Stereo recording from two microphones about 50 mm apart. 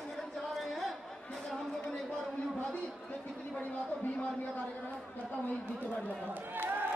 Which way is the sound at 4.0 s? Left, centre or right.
Left.